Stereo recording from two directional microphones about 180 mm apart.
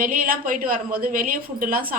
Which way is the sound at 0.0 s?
50° right (ahead or behind).